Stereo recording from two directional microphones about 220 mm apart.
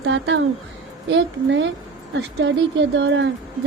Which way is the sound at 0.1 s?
55° right (ahead or behind).